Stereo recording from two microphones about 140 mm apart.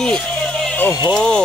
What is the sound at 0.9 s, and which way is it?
Speech, 30° left (ahead or behind).